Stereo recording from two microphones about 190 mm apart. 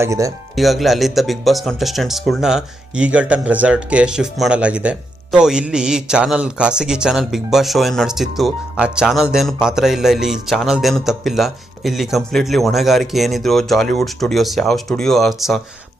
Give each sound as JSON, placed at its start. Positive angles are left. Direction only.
{"t": 0.0, "sound": "speech", "side_deg": -15}
{"t": 0.5, "sound": "speech", "side_deg": 0}